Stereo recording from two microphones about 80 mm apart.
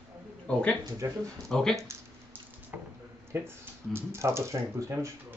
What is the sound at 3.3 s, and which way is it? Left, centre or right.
Speech, right.